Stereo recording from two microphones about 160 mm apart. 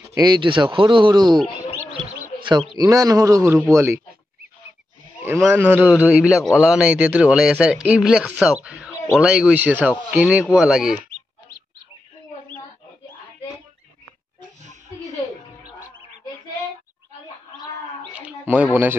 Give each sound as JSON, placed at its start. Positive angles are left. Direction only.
{"t": 0.1, "sound": "speech", "side_deg": -25}
{"t": 2.8, "sound": "speech", "side_deg": -20}
{"t": 5.5, "sound": "speech", "side_deg": -10}
{"t": 5.9, "sound": "speech", "side_deg": 15}
{"t": 6.1, "sound": "a man's voice", "side_deg": -5}
{"t": 18.1, "sound": "a sound", "side_deg": -10}